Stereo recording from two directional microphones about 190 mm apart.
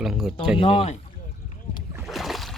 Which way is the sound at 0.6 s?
25° left (ahead or behind).